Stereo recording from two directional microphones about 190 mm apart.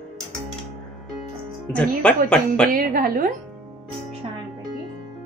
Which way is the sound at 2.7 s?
50° right (ahead or behind).